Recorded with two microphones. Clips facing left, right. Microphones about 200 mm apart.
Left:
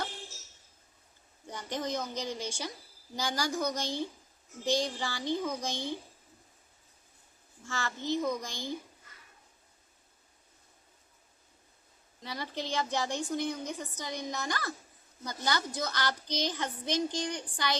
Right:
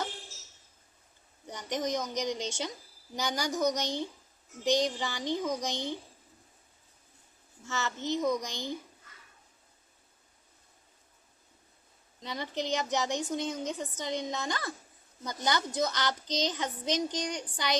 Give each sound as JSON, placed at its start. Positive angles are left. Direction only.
{"t": 1.5, "sound": "a woman's voice", "side_deg": -15}
{"t": 7.6, "sound": "a woman's voice", "side_deg": -20}
{"t": 12.2, "sound": "a woman's voice", "side_deg": -20}